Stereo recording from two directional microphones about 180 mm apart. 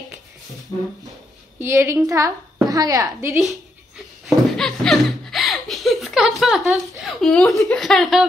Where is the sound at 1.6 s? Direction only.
15° right (ahead or behind).